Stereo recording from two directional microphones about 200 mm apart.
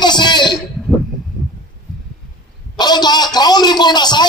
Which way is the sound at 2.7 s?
20° left (ahead or behind).